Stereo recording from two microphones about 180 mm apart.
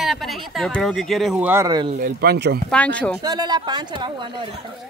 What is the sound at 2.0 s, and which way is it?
Speech, 60° right (ahead or behind).